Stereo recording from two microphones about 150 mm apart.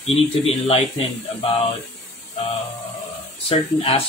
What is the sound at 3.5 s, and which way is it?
Speech, 40° left (ahead or behind).